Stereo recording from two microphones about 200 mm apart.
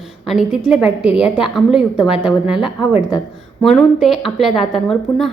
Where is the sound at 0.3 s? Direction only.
Centre (ahead or behind).